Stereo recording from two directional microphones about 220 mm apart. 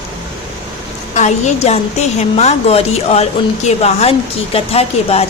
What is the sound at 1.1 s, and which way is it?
A woman's voice, 30° left (ahead or behind).